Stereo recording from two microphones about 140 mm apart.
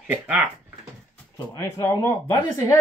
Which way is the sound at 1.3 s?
20° left (ahead or behind).